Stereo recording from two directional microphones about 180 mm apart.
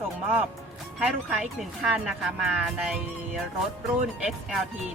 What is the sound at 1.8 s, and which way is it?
Speech, centre (ahead or behind).